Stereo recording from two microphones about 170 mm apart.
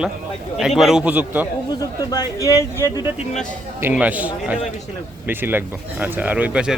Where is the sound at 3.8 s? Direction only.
10° right (ahead or behind).